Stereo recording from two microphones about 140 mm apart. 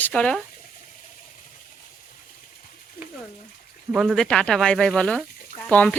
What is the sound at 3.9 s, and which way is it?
Speech, 5° right (ahead or behind).